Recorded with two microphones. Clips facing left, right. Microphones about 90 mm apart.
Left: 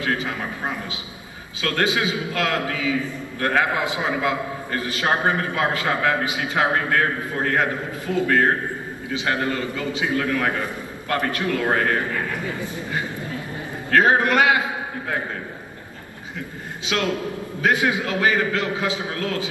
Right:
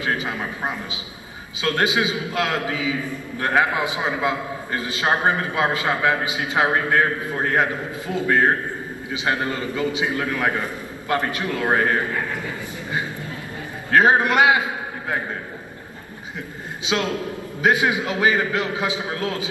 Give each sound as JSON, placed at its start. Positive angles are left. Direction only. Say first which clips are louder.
{"t": 0.0, "sound": "a man's voice", "louder": "even", "side_deg": -20}
{"t": 8.1, "sound": "a man's voice", "louder": "even", "side_deg": -20}
{"t": 13.8, "sound": "a man's voice", "louder": "right 1 dB", "side_deg": -20}
{"t": 16.8, "sound": "a man's voice", "louder": "even", "side_deg": -20}